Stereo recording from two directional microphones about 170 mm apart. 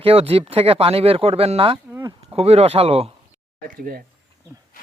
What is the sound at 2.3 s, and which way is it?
Speech, 35° right (ahead or behind).